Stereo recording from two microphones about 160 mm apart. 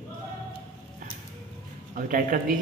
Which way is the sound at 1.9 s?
60° right (ahead or behind).